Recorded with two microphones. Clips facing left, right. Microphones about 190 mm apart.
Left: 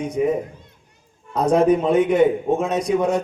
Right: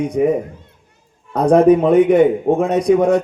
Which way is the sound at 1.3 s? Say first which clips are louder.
Right 5 dB; 60° right (ahead or behind).